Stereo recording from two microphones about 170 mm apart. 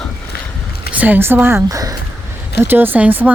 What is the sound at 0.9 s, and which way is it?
Speech, 10° right (ahead or behind).